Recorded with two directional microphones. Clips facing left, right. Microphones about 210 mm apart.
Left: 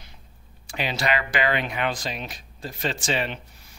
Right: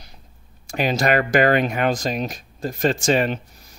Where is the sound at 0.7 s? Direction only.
45° right (ahead or behind).